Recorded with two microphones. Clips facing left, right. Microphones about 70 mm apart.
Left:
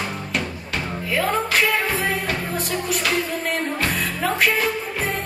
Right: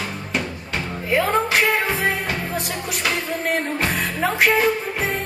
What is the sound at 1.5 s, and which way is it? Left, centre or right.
Music, centre.